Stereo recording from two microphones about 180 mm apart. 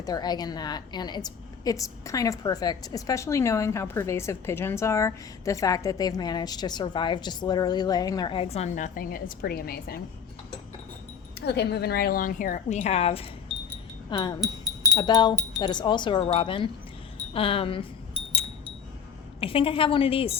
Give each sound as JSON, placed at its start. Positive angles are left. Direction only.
{"t": 0.0, "sound": "a woman's voice", "side_deg": 20}
{"t": 11.3, "sound": "a woman's voice", "side_deg": 65}
{"t": 19.4, "sound": "a woman's voice", "side_deg": 30}